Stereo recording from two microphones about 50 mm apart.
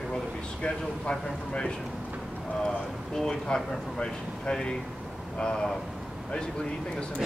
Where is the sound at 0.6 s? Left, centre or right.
Centre.